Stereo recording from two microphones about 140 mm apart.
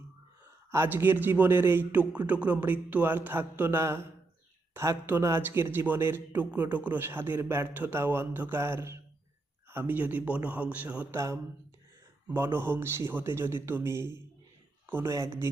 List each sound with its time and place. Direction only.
0.7 s a man's voice: 15° right (ahead or behind)